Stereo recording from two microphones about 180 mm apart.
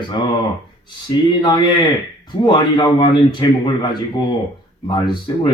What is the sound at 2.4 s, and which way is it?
Speech, 25° left (ahead or behind).